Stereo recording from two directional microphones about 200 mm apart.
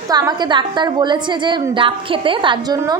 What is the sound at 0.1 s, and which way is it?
A woman's voice, 20° right (ahead or behind).